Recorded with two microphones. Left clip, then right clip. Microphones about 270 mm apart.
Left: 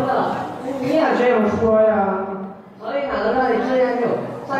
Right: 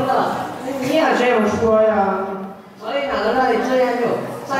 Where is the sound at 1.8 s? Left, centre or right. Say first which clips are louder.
Right 1 dB; centre.